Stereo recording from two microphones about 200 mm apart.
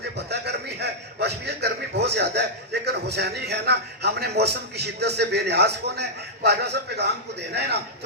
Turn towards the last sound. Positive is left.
turn(degrees=-55)  # may be behind; listen again after turning